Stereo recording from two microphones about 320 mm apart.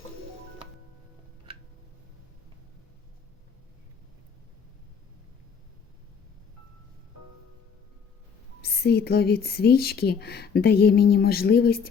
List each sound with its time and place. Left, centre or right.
8.6 s speech: left